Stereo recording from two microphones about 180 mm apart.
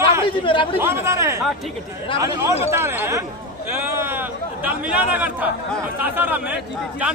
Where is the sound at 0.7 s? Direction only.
15° right (ahead or behind).